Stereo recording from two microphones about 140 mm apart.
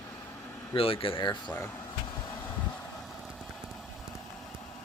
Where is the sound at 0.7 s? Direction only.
40° left (ahead or behind).